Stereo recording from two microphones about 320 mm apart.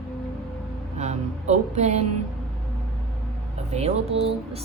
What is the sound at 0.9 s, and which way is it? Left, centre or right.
A woman's voice, right.